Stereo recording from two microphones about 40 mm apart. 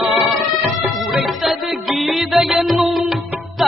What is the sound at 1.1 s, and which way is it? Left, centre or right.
Music, centre.